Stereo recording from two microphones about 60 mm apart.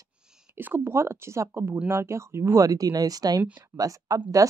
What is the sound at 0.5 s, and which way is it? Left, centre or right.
Speech, right.